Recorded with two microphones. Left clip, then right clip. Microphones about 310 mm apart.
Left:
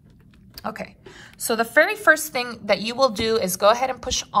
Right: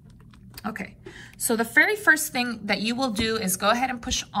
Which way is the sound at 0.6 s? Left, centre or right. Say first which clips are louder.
Left 3 dB; centre.